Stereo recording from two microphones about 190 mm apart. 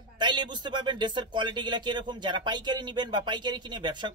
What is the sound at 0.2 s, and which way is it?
A man's voice, 25° right (ahead or behind).